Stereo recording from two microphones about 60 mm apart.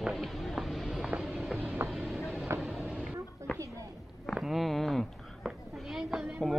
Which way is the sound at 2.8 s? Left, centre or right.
Centre.